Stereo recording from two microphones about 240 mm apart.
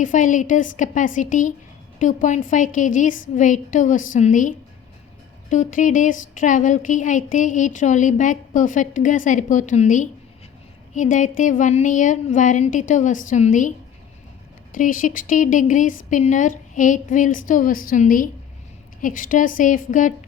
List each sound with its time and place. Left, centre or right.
0.0 s speech: left